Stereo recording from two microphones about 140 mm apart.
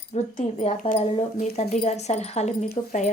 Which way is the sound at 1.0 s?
45° left (ahead or behind).